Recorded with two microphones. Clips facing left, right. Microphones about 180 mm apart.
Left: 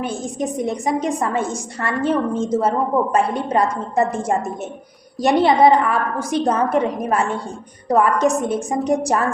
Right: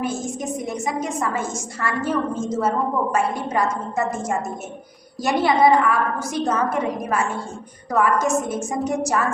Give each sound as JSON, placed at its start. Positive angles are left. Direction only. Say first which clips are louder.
{"t": 0.1, "sound": "a woman's voice", "louder": "left 2 dB", "side_deg": 35}